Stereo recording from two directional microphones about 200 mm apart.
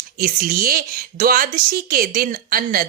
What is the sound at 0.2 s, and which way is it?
A woman's voice, 45° right (ahead or behind).